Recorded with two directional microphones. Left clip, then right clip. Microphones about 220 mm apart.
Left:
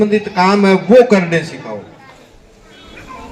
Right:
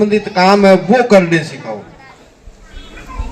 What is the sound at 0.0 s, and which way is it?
A man's voice, 35° right (ahead or behind).